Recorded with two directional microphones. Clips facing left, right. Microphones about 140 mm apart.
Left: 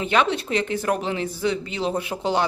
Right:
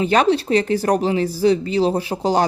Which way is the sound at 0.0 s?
35° right (ahead or behind).